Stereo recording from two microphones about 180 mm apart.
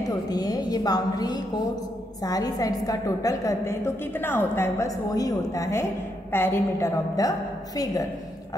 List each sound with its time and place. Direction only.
0.1 s a woman's voice: 20° left (ahead or behind)